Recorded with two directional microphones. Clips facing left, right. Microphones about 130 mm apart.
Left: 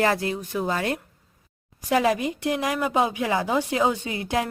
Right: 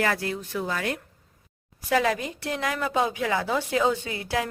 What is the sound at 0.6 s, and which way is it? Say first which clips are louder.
Speech: left 4 dB; 30° left (ahead or behind).